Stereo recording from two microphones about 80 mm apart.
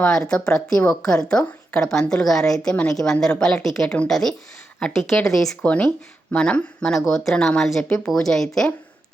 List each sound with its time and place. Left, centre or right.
0.0 s a woman's voice: centre
5.6 s a woman's voice: centre
6.9 s a woman's voice: centre